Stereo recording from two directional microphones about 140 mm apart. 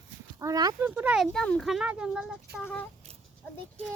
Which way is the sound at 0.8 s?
10° right (ahead or behind).